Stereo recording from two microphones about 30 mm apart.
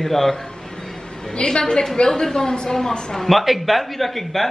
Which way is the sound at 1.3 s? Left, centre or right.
Left.